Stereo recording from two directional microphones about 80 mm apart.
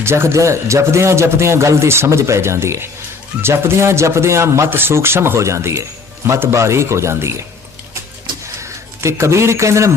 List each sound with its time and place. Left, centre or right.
0.0 s a man's voice: right
8.6 s speech: right